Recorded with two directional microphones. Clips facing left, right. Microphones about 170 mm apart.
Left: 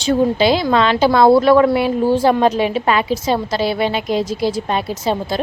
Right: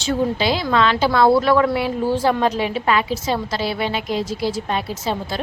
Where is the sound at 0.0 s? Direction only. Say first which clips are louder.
Left 5 dB; 20° left (ahead or behind).